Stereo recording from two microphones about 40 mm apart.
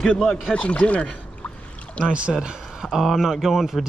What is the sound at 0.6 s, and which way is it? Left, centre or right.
Speech, left.